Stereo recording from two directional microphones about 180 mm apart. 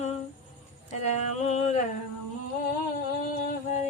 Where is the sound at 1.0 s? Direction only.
40° left (ahead or behind).